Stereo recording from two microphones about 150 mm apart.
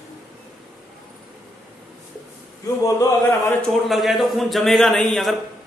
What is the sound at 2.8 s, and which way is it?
Speech, 20° left (ahead or behind).